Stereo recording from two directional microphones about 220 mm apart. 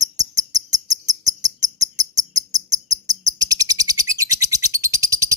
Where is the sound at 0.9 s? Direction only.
15° right (ahead or behind).